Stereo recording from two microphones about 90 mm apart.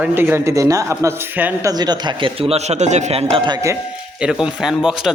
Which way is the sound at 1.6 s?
45° right (ahead or behind).